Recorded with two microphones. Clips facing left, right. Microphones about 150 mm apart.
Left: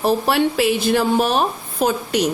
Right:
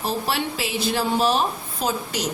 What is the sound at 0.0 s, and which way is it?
Speech, 55° left (ahead or behind).